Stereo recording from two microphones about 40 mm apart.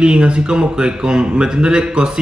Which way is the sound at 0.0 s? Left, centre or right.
Right.